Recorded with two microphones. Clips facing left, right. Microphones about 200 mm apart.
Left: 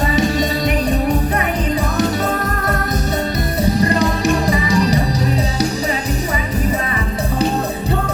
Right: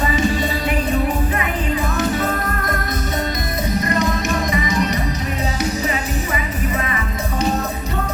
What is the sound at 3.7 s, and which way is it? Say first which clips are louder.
Music: left 1 dB; 35° left (ahead or behind).